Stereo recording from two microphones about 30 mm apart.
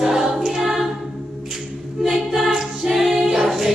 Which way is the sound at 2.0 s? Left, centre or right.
Centre.